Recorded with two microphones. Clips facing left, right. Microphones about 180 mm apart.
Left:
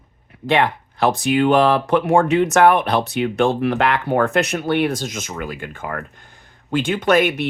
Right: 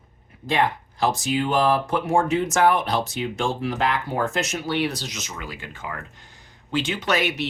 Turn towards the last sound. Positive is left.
turn(degrees=50)  # may be behind; listen again after turning